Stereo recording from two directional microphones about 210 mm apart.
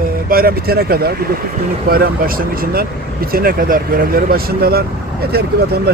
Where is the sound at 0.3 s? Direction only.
45° right (ahead or behind).